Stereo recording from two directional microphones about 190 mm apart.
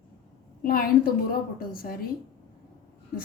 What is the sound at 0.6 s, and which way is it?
A woman's voice, 50° left (ahead or behind).